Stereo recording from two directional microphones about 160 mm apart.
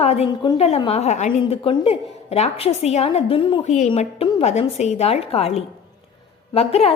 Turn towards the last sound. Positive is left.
turn(degrees=40)  # may be behind; listen again after turning